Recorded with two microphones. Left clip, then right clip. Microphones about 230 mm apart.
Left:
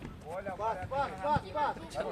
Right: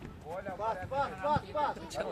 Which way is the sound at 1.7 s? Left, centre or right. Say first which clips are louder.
Even; right.